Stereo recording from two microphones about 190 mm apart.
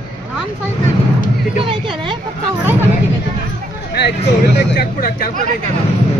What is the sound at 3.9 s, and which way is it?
Speech, 65° left (ahead or behind).